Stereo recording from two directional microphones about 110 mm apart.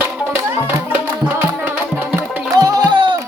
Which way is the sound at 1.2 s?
15° right (ahead or behind).